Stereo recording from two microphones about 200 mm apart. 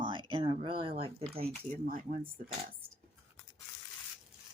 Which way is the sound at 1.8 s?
40° right (ahead or behind).